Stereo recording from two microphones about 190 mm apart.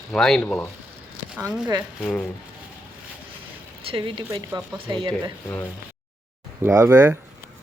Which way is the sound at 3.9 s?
25° right (ahead or behind).